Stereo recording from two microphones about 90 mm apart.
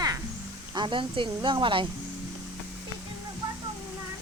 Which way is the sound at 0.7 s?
65° right (ahead or behind).